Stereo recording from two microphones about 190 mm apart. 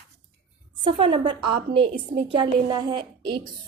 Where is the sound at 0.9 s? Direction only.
25° right (ahead or behind).